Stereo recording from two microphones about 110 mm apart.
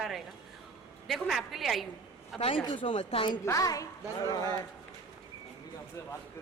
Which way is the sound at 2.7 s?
50° left (ahead or behind).